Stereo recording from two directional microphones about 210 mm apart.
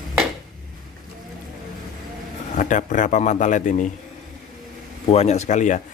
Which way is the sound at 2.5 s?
35° left (ahead or behind).